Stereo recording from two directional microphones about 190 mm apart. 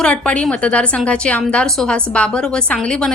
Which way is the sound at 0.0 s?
5° left (ahead or behind).